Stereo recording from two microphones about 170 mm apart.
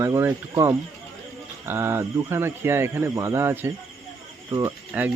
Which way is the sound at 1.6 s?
15° right (ahead or behind).